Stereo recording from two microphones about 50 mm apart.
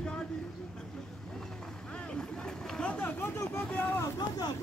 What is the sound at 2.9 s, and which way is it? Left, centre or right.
Vehicle, left.